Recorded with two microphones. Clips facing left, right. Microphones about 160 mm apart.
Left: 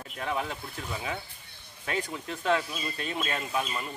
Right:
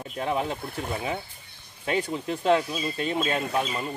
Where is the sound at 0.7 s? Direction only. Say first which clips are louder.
Right 6 dB; 55° right (ahead or behind).